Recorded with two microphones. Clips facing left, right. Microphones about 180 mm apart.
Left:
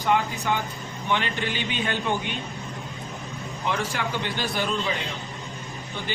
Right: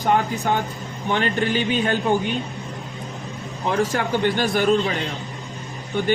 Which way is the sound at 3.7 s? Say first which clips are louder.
Right 7 dB; 40° right (ahead or behind).